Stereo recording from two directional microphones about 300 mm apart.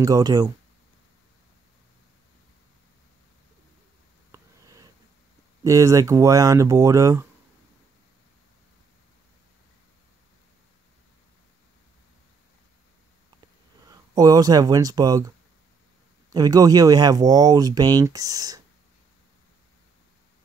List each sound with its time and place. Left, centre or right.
0.0 s speech: centre
4.3 s a sound: centre
5.6 s speech: centre
13.8 s speech: centre